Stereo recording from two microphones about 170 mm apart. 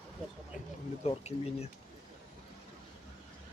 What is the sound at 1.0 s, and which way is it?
Speech, 35° left (ahead or behind).